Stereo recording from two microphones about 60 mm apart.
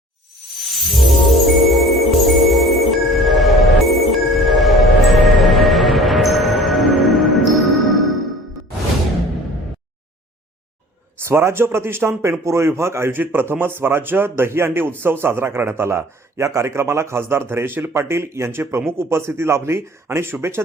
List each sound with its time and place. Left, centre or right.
0.9 s music: centre
11.2 s speech: right
13.1 s a man's voice: right